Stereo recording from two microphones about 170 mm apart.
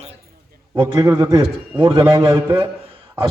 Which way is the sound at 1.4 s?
30° right (ahead or behind).